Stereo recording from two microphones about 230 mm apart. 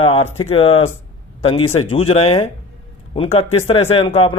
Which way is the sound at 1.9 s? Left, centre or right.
Left.